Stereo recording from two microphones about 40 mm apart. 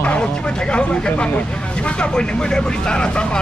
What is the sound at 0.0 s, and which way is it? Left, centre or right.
Vehicle, left.